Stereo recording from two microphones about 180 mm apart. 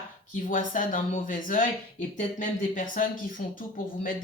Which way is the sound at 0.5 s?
50° left (ahead or behind).